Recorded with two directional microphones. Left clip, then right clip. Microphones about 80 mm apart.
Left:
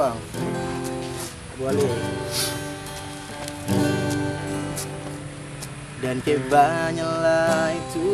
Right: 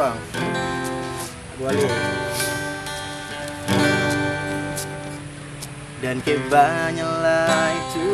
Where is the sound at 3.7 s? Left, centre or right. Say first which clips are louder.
Right 5 dB; centre.